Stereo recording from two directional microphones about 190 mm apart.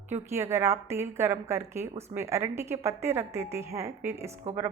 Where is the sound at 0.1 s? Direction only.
15° right (ahead or behind).